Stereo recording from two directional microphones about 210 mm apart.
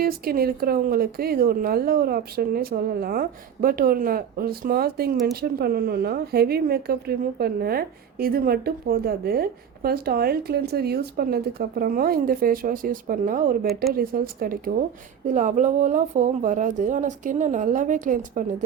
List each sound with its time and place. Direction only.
0.0 s a woman's voice: 45° right (ahead or behind)